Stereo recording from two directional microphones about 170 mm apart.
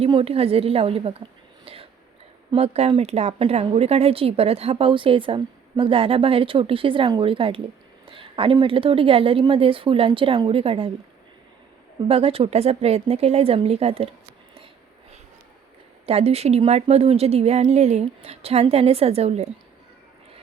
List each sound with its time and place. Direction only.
0.0 s a woman's voice: 35° right (ahead or behind)
1.6 s whispering: 35° right (ahead or behind)
2.5 s a woman's voice: 35° right (ahead or behind)
8.0 s a sound: 30° right (ahead or behind)
8.5 s a woman's voice: 30° right (ahead or behind)
12.0 s a woman's voice: 35° right (ahead or behind)
16.0 s a woman's voice: 35° right (ahead or behind)